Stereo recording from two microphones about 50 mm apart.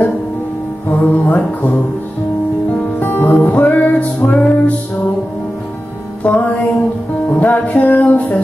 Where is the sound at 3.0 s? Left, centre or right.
Left.